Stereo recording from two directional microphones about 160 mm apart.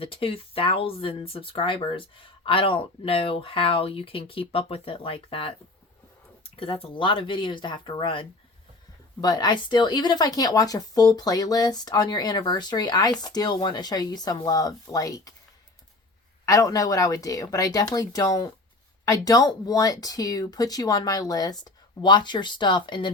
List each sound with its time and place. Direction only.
0.0 s speech: 35° left (ahead or behind)
16.5 s speech: 20° left (ahead or behind)